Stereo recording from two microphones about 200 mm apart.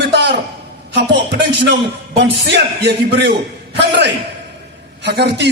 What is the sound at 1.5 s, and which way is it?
A man's voice, 55° right (ahead or behind).